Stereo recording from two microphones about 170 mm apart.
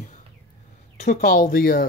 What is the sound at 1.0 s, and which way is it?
Speech, 60° left (ahead or behind).